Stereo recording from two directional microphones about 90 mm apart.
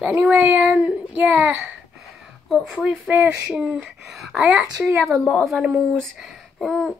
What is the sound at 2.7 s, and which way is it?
Speech, 5° right (ahead or behind).